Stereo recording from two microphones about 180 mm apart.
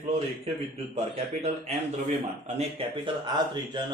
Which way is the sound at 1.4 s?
40° right (ahead or behind).